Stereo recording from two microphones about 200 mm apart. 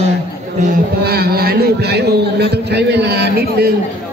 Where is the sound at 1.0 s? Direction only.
50° right (ahead or behind).